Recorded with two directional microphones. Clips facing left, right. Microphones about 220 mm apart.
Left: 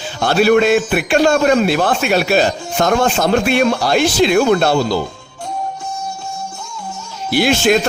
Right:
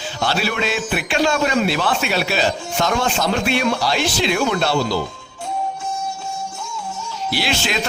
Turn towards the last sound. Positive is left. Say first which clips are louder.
# left 10 dB
turn(degrees=50)  # may be behind; listen again after turning